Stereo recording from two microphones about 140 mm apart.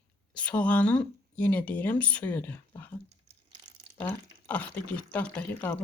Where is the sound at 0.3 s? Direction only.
10° left (ahead or behind).